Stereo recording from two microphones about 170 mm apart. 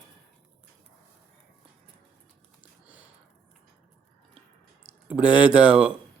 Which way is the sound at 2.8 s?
10° right (ahead or behind).